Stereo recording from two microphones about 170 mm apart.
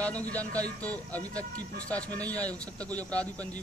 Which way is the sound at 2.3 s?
10° left (ahead or behind).